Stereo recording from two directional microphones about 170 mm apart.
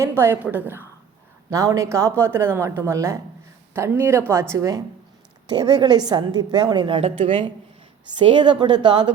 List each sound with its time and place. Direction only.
0.0 s a woman's voice: 15° right (ahead or behind)